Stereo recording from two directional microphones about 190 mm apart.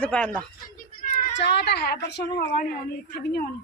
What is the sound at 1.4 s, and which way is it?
Speech, 65° left (ahead or behind).